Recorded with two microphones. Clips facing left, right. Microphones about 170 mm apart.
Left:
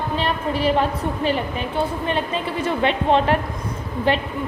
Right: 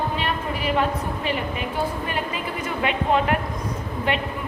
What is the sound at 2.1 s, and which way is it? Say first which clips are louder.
A woman's voice: left 4 dB; 30° left (ahead or behind).